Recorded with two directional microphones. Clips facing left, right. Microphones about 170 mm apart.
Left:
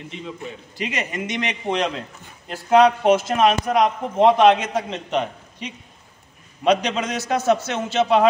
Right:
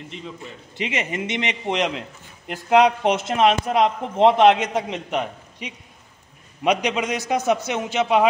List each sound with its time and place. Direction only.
0.7 s a man's voice: 25° right (ahead or behind)